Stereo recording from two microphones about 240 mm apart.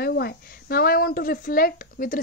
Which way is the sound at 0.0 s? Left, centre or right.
Left.